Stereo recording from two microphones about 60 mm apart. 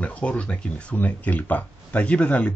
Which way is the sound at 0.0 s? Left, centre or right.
Left.